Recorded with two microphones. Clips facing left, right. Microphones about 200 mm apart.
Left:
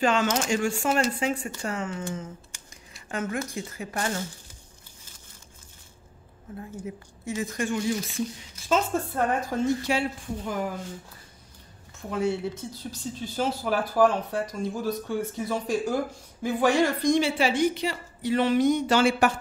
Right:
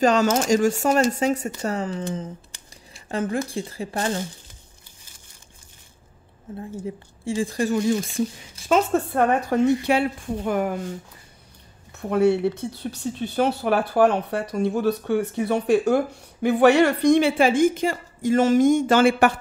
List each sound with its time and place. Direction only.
0.0 s speech: 40° right (ahead or behind)
6.5 s speech: 30° right (ahead or behind)
8.6 s speech: 65° right (ahead or behind)
11.9 s a woman's voice: 65° right (ahead or behind)